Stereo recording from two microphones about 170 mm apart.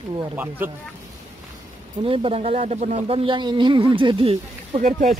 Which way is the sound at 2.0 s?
35° right (ahead or behind).